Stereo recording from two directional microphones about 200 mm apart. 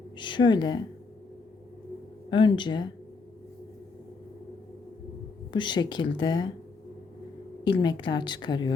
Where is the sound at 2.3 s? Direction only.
25° left (ahead or behind).